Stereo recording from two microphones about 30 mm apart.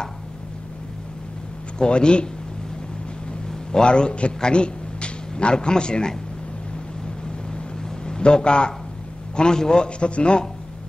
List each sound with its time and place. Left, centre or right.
1.8 s a man's voice: left
3.8 s a man's voice: left
7.5 s a sound: left
9.4 s a man's voice: left
9.9 s a man's voice: left